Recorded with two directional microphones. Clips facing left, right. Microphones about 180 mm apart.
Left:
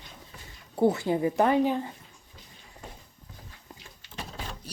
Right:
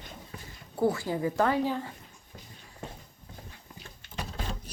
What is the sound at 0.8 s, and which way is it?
Speech, 20° left (ahead or behind).